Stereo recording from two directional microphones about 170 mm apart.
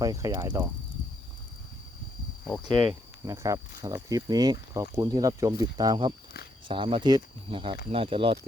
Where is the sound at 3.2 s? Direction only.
20° right (ahead or behind).